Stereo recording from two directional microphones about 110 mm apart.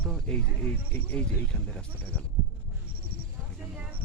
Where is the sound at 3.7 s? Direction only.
10° right (ahead or behind).